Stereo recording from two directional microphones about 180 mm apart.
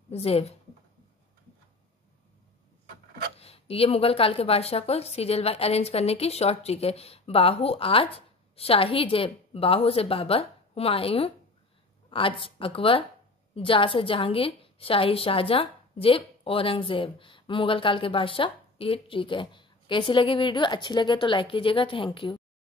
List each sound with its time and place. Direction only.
0.1 s speech: 35° left (ahead or behind)
3.3 s a woman's voice: 35° left (ahead or behind)